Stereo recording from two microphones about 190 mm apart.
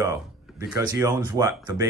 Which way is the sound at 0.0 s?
15° right (ahead or behind).